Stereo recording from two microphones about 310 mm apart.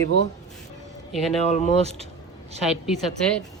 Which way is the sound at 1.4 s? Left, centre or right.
Left.